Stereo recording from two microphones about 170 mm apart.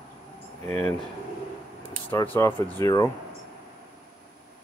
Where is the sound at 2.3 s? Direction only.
15° left (ahead or behind).